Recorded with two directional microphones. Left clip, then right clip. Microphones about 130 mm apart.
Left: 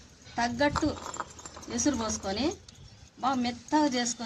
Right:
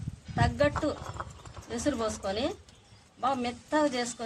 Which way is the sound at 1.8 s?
20° right (ahead or behind).